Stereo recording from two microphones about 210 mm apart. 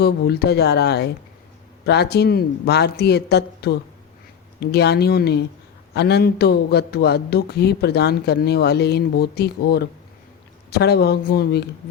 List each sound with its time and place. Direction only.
0.0 s a man's voice: 50° left (ahead or behind)